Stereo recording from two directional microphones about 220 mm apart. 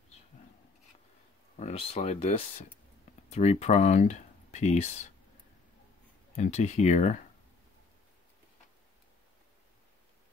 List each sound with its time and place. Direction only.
1.6 s speech: 25° left (ahead or behind)
6.3 s speech: 35° left (ahead or behind)